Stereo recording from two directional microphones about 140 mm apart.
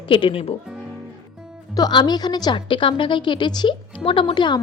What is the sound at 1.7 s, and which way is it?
A woman's voice, 30° left (ahead or behind).